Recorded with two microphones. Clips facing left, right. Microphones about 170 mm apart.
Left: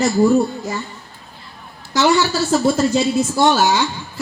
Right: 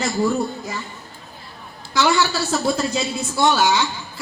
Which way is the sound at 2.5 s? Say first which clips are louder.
Left 6 dB; 45° left (ahead or behind).